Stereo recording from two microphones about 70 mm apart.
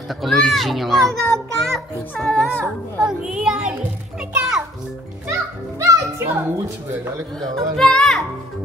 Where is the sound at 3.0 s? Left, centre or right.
Centre.